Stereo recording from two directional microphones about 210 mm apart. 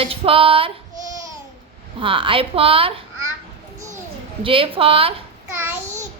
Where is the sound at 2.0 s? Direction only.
25° right (ahead or behind).